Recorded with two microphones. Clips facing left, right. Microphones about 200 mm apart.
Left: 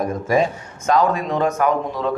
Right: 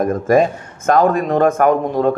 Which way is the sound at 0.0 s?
50° right (ahead or behind).